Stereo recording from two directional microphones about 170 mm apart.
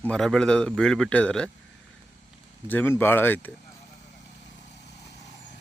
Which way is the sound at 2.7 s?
10° left (ahead or behind).